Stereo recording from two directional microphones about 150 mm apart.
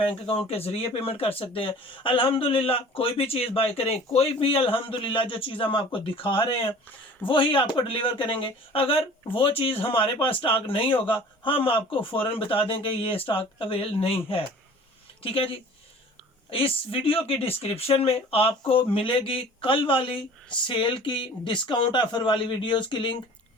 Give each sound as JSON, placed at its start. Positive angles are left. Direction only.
{"t": 0.0, "sound": "speech", "side_deg": 40}
{"t": 16.5, "sound": "speech", "side_deg": 40}